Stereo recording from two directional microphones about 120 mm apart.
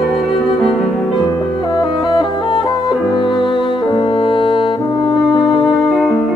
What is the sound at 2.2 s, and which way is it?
Music, 40° left (ahead or behind).